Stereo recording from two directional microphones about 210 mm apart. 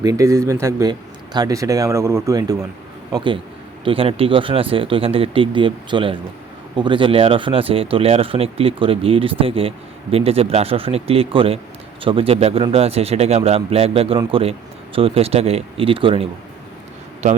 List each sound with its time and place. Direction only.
0.0 s speech: 15° right (ahead or behind)